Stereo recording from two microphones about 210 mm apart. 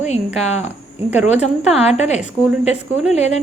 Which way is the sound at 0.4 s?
30° left (ahead or behind).